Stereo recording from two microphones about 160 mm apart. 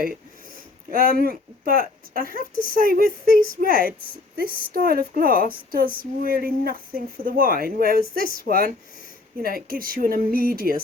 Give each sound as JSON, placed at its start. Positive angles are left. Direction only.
{"t": 0.9, "sound": "speech", "side_deg": -65}